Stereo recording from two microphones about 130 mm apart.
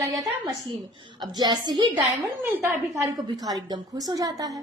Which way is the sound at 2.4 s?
15° right (ahead or behind).